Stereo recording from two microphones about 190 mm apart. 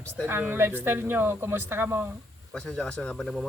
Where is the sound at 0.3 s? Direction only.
10° right (ahead or behind).